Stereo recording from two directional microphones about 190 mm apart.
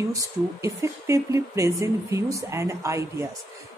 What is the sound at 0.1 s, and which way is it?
Speech, 15° right (ahead or behind).